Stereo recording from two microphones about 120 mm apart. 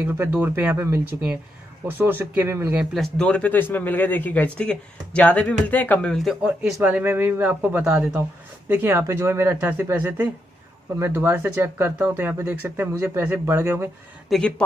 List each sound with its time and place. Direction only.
0.0 s speech: 15° right (ahead or behind)
1.9 s speech: 15° right (ahead or behind)
2.7 s a man's voice: 5° right (ahead or behind); by 6.1 s 15° left (ahead or behind)
6.1 s speech: centre (ahead or behind)
6.6 s speech: 15° right (ahead or behind)
8.6 s speech: 15° right (ahead or behind)
14.3 s speech: centre (ahead or behind)